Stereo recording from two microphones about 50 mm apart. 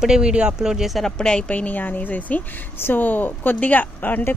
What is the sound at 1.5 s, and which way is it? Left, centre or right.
A woman's voice, left.